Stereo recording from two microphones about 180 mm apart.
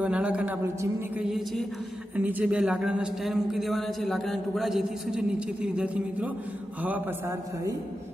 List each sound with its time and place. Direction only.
0.0 s a woman's voice: 5° right (ahead or behind)